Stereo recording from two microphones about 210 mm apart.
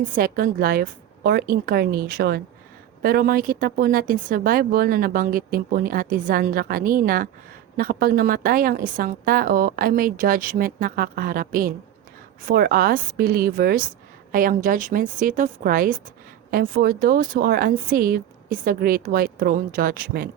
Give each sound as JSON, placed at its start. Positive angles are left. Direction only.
{"t": 0.2, "sound": "a woman's voice", "side_deg": -45}